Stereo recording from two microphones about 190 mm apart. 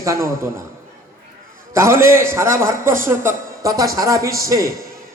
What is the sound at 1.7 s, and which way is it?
A man's voice, 15° right (ahead or behind).